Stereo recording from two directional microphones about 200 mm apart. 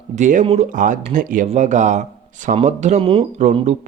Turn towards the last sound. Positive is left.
turn(degrees=-35)  # may be behind; listen again after turning